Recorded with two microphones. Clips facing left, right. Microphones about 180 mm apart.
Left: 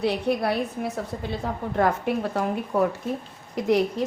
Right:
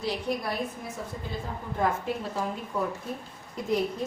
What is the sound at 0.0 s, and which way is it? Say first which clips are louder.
A woman's voice: left 7 dB; 65° left (ahead or behind).